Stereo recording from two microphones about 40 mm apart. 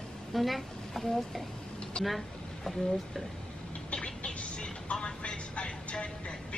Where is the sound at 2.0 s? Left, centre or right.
Centre.